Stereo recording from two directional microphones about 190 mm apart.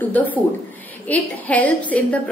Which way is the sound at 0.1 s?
10° left (ahead or behind).